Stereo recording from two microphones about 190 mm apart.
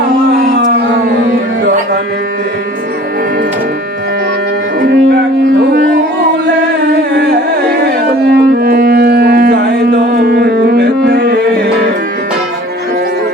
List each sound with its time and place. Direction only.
4.8 s music: 60° right (ahead or behind)
6.8 s carnatic music: 60° right (ahead or behind)
7.7 s music: 60° right (ahead or behind)